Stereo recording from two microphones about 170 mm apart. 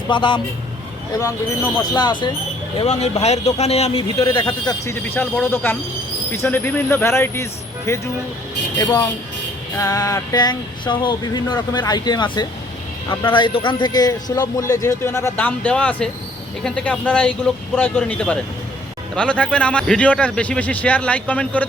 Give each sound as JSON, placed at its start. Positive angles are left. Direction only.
{"t": 0.1, "sound": "a man's voice", "side_deg": 30}
{"t": 1.2, "sound": "a man's voice", "side_deg": 15}
{"t": 2.7, "sound": "speech", "side_deg": 40}
{"t": 5.0, "sound": "a man's voice", "side_deg": 10}